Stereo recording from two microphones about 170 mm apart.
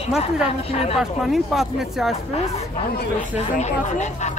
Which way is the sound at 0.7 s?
35° left (ahead or behind).